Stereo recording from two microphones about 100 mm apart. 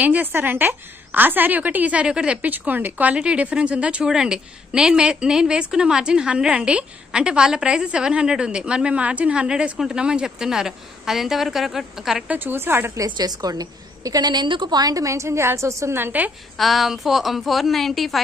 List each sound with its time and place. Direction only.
0.0 s a woman's voice: 15° right (ahead or behind)
12.3 s a woman's voice: 20° right (ahead or behind)
12.9 s a woman's voice: 40° right (ahead or behind); by 16.3 s 20° right (ahead or behind)
16.5 s a woman's voice: centre (ahead or behind)